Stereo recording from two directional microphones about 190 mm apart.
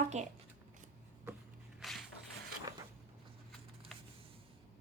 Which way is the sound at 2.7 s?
20° right (ahead or behind).